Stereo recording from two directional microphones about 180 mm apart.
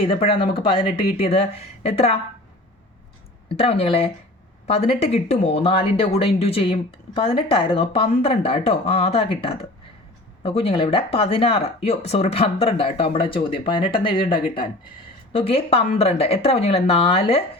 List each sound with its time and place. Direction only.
0.0 s speech: 30° left (ahead or behind)
3.6 s speech: 35° left (ahead or behind)